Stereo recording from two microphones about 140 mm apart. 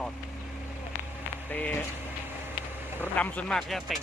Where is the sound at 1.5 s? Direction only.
10° left (ahead or behind).